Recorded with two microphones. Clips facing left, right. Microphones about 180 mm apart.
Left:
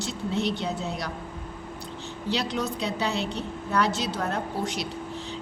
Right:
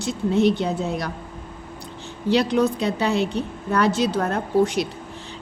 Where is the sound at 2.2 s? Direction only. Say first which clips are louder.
Right 9 dB; 55° right (ahead or behind).